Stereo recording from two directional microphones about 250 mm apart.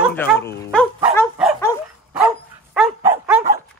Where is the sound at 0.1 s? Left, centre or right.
Centre.